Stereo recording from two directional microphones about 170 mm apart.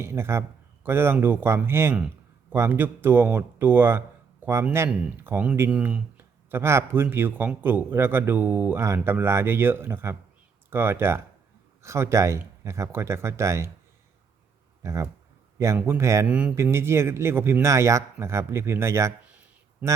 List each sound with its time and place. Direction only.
0.0 s speech: 15° right (ahead or behind)
14.8 s speech: 15° right (ahead or behind)